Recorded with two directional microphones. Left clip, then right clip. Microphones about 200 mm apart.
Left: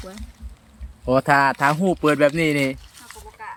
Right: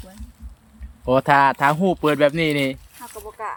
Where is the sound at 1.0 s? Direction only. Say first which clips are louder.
Right 1 dB; 5° right (ahead or behind).